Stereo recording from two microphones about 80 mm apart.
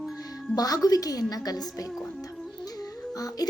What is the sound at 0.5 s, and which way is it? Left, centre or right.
A woman's voice, left.